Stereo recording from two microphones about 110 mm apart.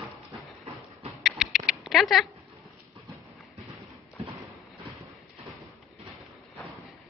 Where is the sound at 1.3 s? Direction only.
5° right (ahead or behind).